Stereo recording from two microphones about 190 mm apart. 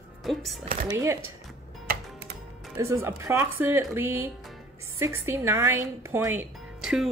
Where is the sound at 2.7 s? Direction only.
15° right (ahead or behind).